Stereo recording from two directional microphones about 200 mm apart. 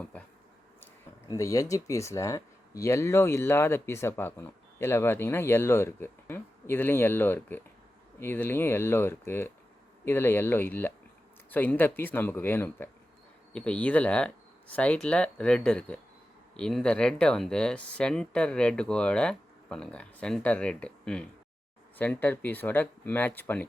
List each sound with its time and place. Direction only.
1.3 s speech: 15° left (ahead or behind)